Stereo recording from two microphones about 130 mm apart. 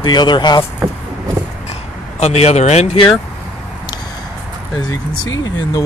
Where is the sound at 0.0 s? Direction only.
35° left (ahead or behind).